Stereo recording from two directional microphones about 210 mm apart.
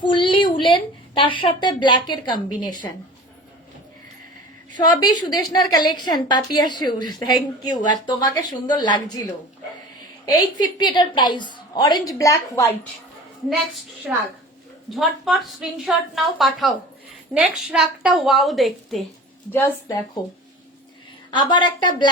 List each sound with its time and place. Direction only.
0.0 s a sound: 25° left (ahead or behind)
1.6 s a woman's voice: 20° left (ahead or behind)
4.8 s a woman's voice: 20° left (ahead or behind)
10.2 s a woman's voice: 20° left (ahead or behind)
13.5 s a woman's voice: 5° right (ahead or behind)
21.2 s a woman's voice: 20° left (ahead or behind)